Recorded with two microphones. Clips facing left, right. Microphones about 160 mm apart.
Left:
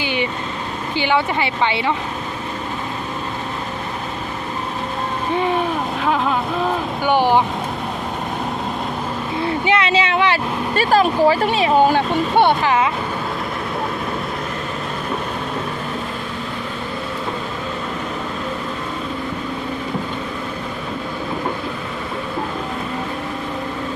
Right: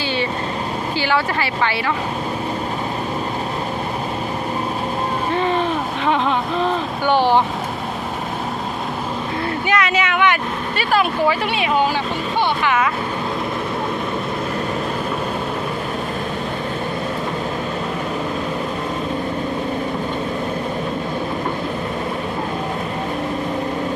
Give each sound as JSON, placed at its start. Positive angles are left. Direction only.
{"t": 0.0, "sound": "vehicle", "side_deg": 15}
{"t": 0.9, "sound": "speech", "side_deg": 20}
{"t": 5.3, "sound": "boat", "side_deg": 10}
{"t": 6.1, "sound": "speech", "side_deg": 5}
{"t": 7.1, "sound": "speech", "side_deg": 15}
{"t": 9.6, "sound": "speech", "side_deg": 30}
{"t": 11.9, "sound": "speech", "side_deg": 55}
{"t": 12.6, "sound": "speech", "side_deg": 30}